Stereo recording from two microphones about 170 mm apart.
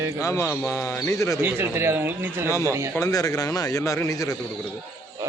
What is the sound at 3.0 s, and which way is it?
Speech, 20° left (ahead or behind).